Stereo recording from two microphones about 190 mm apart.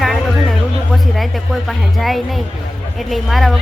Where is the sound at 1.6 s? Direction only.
Centre (ahead or behind).